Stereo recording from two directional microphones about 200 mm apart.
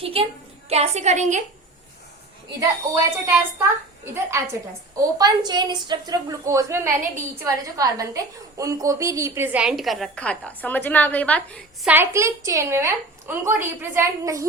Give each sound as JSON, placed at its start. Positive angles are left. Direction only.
{"t": 0.0, "sound": "a woman's voice", "side_deg": -30}
{"t": 2.6, "sound": "a woman's voice", "side_deg": -15}
{"t": 11.9, "sound": "a woman's voice", "side_deg": -10}